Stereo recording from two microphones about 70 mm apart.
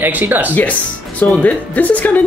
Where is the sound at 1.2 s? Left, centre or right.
Left.